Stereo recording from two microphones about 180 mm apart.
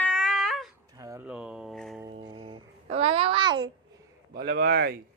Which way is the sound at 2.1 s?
25° right (ahead or behind).